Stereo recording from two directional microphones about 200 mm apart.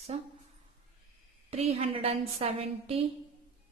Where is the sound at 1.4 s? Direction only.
30° right (ahead or behind).